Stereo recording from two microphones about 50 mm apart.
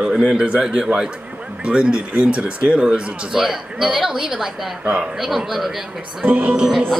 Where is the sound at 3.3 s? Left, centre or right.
Centre.